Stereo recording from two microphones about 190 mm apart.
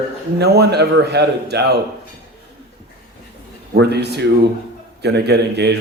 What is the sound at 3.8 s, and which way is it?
A man's voice, 60° right (ahead or behind).